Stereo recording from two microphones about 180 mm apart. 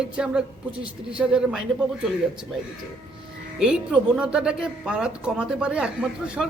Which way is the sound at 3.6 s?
5° right (ahead or behind).